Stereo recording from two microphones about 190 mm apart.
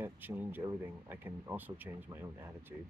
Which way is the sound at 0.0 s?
10° right (ahead or behind).